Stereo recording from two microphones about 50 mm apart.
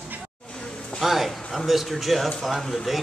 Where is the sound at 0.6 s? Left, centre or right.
Centre.